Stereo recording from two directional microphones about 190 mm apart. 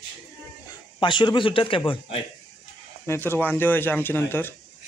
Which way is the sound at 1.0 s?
25° left (ahead or behind).